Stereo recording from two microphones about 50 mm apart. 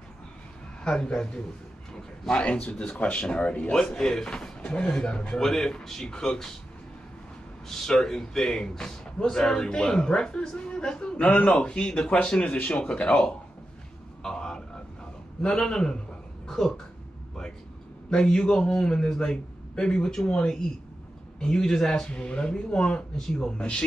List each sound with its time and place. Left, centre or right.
0.8 s a man's voice: centre
3.7 s a man's voice: centre
7.6 s a man's voice: centre
14.2 s a sound: centre
15.4 s a man's voice: centre
18.1 s a man's voice: centre